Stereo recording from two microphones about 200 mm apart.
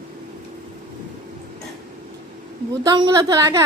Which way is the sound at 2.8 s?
20° right (ahead or behind).